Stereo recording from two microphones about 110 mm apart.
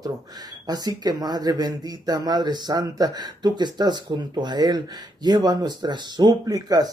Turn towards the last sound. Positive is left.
turn(degrees=-35)  # may be behind; listen again after turning